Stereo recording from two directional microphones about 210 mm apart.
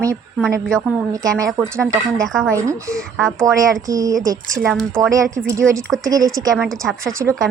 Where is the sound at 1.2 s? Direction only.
15° right (ahead or behind).